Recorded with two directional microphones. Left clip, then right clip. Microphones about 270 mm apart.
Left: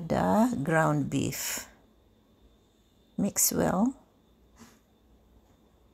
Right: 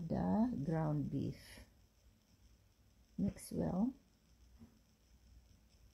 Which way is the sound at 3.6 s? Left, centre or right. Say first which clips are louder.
Left 12 dB; left.